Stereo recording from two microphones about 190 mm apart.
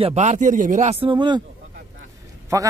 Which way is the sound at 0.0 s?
35° right (ahead or behind).